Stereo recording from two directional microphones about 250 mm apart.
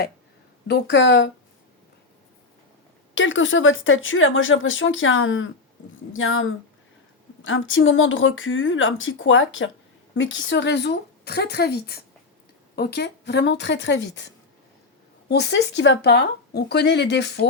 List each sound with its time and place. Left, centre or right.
0.7 s speech: left
3.2 s speech: left
15.3 s speech: left